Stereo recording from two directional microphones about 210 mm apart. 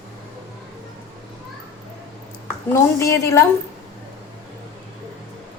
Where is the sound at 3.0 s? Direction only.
15° left (ahead or behind).